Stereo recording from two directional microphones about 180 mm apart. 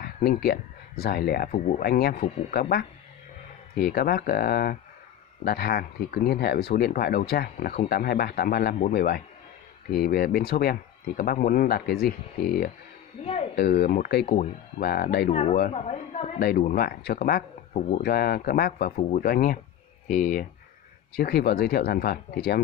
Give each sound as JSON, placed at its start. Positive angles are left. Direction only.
{"t": 0.0, "sound": "speech", "side_deg": 60}
{"t": 2.2, "sound": "speech", "side_deg": 40}
{"t": 3.7, "sound": "speech", "side_deg": 55}
{"t": 8.7, "sound": "a man's voice", "side_deg": 45}
{"t": 13.2, "sound": "speech", "side_deg": 30}
{"t": 13.6, "sound": "speech", "side_deg": 60}
{"t": 15.7, "sound": "a woman's voice", "side_deg": 35}
{"t": 16.3, "sound": "a man's voice", "side_deg": 55}
{"t": 21.2, "sound": "speech", "side_deg": 60}